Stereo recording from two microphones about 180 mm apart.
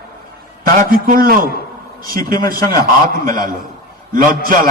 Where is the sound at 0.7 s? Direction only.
50° right (ahead or behind).